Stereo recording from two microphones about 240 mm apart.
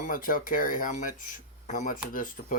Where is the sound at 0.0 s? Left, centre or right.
Left.